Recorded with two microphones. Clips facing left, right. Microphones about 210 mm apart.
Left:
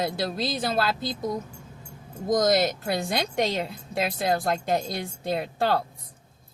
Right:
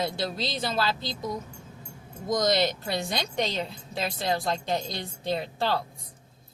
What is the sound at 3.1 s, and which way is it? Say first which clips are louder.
A woman's voice: left 3 dB; 55° left (ahead or behind).